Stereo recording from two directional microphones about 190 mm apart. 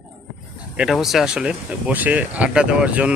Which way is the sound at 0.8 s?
Centre (ahead or behind).